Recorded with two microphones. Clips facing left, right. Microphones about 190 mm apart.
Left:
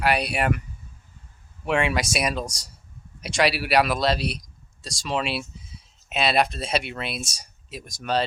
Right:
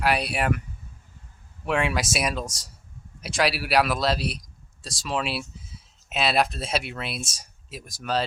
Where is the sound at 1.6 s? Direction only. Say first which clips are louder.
Left 2 dB; centre (ahead or behind).